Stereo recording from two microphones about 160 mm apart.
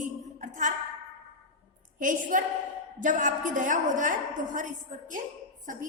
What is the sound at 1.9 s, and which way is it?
A woman's voice, 55° right (ahead or behind).